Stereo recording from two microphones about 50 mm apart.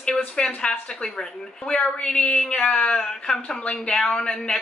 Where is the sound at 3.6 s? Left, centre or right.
Left.